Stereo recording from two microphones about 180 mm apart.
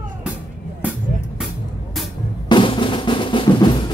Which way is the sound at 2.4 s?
25° left (ahead or behind).